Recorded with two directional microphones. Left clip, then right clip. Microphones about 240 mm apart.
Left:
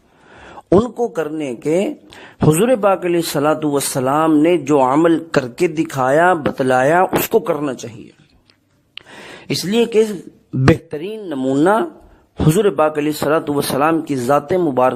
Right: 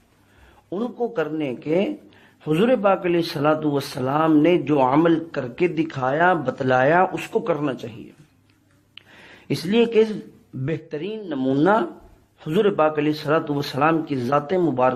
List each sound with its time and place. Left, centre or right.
0.4 s speech: left
9.0 s gasp: left
10.6 s speech: left